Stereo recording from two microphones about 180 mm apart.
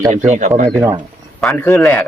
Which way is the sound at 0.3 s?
45° right (ahead or behind).